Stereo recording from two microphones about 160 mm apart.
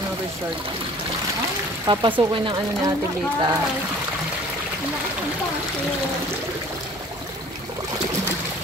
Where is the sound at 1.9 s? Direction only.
30° right (ahead or behind).